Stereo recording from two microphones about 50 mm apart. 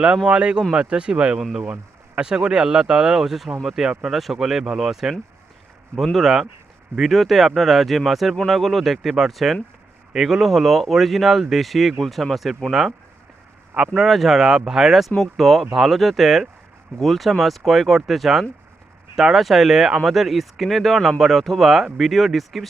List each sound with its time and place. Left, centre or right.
0.3 s speech: right; by 5.1 s centre
6.1 s speech: centre
13.7 s speech: centre
14.0 s speech: centre